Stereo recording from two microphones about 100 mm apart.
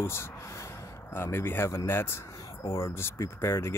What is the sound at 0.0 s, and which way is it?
Speech, 25° left (ahead or behind).